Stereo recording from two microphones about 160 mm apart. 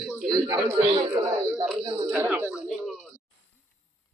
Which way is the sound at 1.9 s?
35° right (ahead or behind).